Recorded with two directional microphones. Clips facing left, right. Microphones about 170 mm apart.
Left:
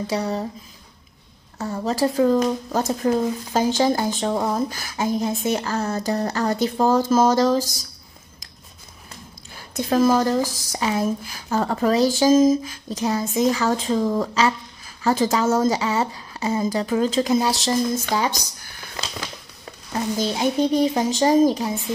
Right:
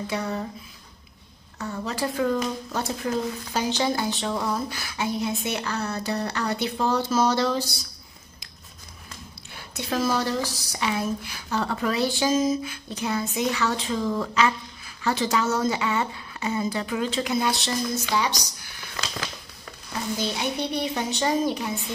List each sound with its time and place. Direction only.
0.0 s speech: 35° left (ahead or behind)
1.6 s speech: 40° left (ahead or behind)
9.6 s speech: 45° left (ahead or behind)
18.0 s speech: 50° left (ahead or behind)
19.9 s speech: 40° left (ahead or behind)